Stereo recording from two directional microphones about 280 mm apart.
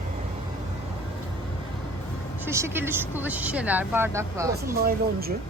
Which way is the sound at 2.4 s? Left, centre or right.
Centre.